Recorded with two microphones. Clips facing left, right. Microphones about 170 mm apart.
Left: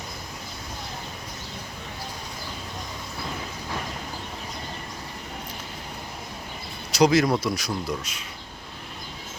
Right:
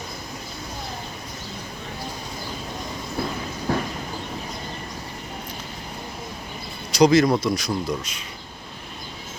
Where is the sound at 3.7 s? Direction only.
60° right (ahead or behind).